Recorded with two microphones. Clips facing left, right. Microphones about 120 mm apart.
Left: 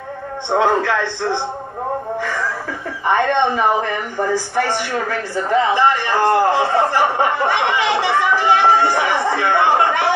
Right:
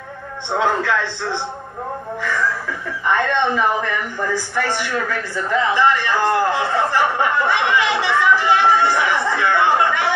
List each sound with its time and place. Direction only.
0.7 s speech: 40° left (ahead or behind)
3.1 s speech: 25° left (ahead or behind)
3.5 s speech: 35° left (ahead or behind)